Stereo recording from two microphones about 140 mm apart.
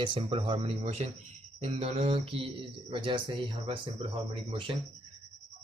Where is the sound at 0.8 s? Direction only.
50° right (ahead or behind).